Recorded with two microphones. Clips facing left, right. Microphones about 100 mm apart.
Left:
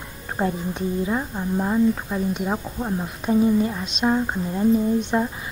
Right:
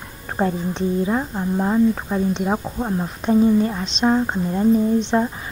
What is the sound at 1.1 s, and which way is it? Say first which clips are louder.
Speech: right 3 dB; 10° right (ahead or behind).